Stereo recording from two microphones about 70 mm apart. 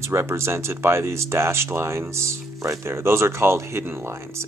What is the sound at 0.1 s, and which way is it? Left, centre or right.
Speech, right.